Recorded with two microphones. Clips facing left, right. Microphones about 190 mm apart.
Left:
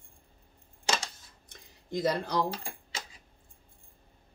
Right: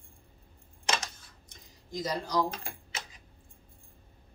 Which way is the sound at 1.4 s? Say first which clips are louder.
Left 6 dB; 60° left (ahead or behind).